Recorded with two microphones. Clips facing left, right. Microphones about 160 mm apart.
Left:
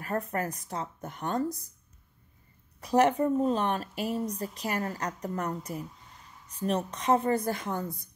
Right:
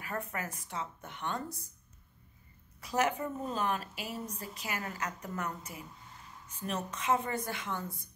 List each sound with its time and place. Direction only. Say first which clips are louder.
0.0 s speech: left 7 dB; 35° left (ahead or behind)
2.8 s speech: left 8 dB; 35° left (ahead or behind)
3.9 s speech: left 9 dB; centre (ahead or behind)
4.3 s speech: left 7 dB; 35° left (ahead or behind)